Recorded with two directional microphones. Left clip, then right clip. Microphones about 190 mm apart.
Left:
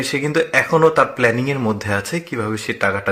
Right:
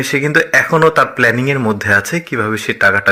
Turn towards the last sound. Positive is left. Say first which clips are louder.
# right 7 dB
turn(degrees=-20)  # may be behind; listen again after turning